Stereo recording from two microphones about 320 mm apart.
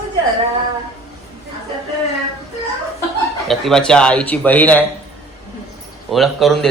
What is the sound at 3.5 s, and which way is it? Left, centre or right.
A man's voice, centre.